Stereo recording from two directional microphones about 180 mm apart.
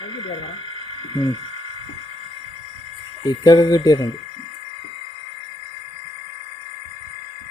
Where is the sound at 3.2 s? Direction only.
20° left (ahead or behind).